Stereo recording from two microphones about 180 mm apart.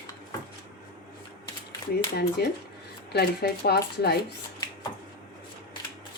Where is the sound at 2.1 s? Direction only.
60° left (ahead or behind).